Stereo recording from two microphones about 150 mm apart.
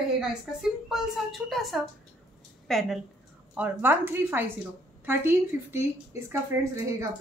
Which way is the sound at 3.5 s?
10° right (ahead or behind).